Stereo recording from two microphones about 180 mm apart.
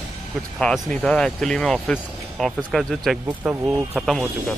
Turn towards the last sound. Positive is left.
turn(degrees=-5)  # may be behind; listen again after turning